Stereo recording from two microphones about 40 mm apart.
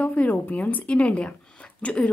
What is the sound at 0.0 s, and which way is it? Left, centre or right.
Speech, left.